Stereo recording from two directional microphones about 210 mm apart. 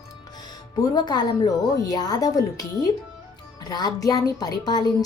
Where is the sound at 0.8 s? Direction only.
20° left (ahead or behind).